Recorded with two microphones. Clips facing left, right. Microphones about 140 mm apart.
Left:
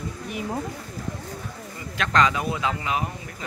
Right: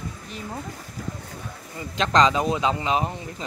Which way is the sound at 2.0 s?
20° right (ahead or behind).